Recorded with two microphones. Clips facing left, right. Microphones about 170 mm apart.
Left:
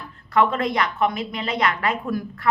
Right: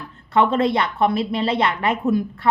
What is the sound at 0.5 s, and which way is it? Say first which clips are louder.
A woman's voice: right 4 dB; 25° right (ahead or behind).